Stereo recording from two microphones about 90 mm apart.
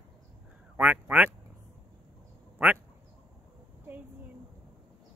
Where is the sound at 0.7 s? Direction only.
20° right (ahead or behind).